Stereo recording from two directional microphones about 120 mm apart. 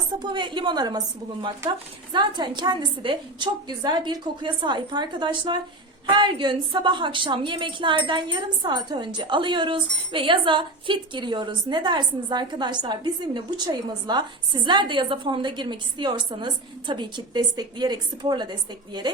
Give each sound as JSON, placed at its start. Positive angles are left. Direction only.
{"t": 0.2, "sound": "a woman's voice", "side_deg": -40}